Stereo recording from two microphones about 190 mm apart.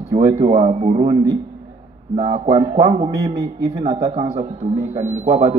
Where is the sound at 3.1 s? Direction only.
15° right (ahead or behind).